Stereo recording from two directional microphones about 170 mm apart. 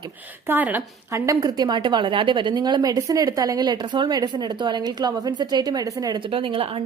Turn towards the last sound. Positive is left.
turn(degrees=-30)  # may be behind; listen again after turning